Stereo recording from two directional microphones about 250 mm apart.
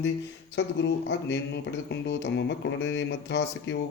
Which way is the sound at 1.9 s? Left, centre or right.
Left.